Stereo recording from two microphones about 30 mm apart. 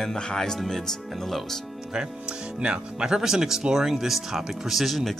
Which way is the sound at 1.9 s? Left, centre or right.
Right.